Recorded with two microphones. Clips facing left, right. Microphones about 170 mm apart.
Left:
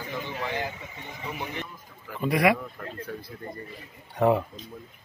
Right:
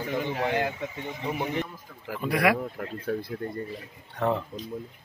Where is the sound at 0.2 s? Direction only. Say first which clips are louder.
Right 5 dB; 60° right (ahead or behind).